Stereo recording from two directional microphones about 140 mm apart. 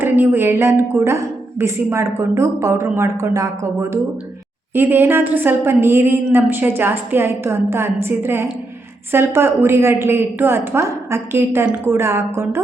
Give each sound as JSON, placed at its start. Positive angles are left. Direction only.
{"t": 0.0, "sound": "a woman's voice", "side_deg": -15}